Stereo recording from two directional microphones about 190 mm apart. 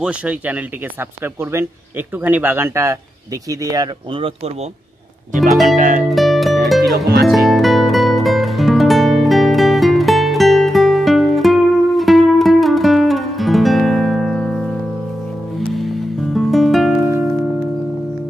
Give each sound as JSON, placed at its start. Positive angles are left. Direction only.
{"t": 0.0, "sound": "speech", "side_deg": -5}
{"t": 5.3, "sound": "music", "side_deg": -40}
{"t": 6.0, "sound": "music", "side_deg": 0}